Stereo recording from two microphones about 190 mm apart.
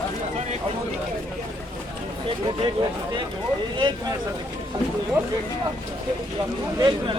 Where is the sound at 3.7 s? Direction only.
25° right (ahead or behind).